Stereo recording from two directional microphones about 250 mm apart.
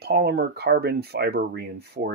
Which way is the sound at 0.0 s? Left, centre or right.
Right.